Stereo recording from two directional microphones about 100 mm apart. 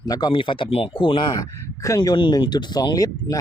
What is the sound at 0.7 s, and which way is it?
Speech, 70° left (ahead or behind).